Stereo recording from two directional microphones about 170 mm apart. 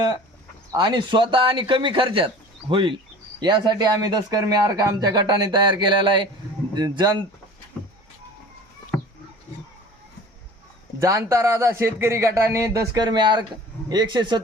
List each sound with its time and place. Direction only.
0.7 s speech: 25° right (ahead or behind)
11.0 s speech: 20° right (ahead or behind)